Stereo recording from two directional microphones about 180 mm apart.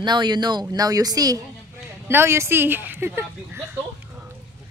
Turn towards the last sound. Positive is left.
turn(degrees=-10)  # may be behind; listen again after turning